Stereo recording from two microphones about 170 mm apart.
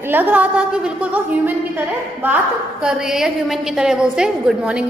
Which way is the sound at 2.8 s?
5° right (ahead or behind).